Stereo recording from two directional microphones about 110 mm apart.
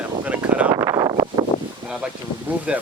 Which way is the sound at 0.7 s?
30° right (ahead or behind).